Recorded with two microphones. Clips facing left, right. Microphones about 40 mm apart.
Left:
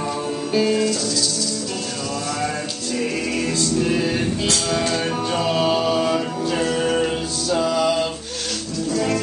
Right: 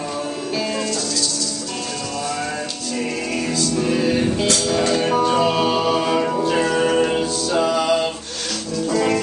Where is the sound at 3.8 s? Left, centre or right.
Centre.